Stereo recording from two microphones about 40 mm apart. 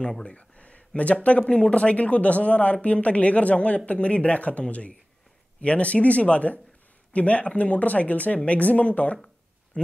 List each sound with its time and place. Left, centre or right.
0.2 s speech: left